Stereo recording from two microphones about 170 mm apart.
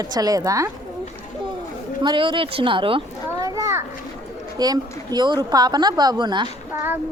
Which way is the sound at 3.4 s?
20° right (ahead or behind).